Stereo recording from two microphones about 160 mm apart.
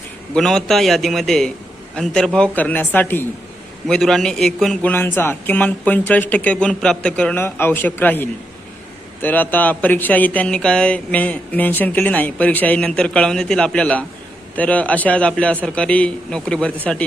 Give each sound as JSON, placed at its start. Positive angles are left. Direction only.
{"t": 0.3, "sound": "a man's voice", "side_deg": 5}